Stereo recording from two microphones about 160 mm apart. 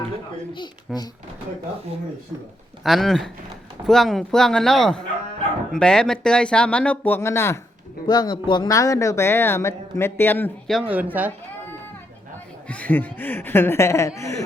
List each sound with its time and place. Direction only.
0.9 s speech: 5° right (ahead or behind)
2.8 s speech: centre (ahead or behind)
10.7 s speech: 5° right (ahead or behind)
12.6 s speech: 10° left (ahead or behind)